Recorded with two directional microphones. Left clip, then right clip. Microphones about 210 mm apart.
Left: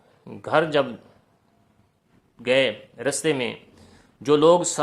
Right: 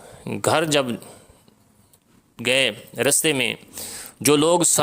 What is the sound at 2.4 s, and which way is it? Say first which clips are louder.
A man's voice: right 1 dB; 40° right (ahead or behind).